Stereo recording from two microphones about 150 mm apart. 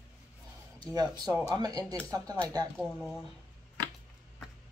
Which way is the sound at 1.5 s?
25° right (ahead or behind).